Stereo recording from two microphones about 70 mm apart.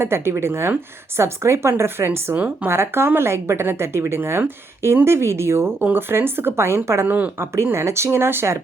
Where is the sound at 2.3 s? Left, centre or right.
Centre.